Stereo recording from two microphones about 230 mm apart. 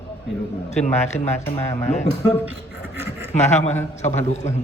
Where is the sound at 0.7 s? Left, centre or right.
Left.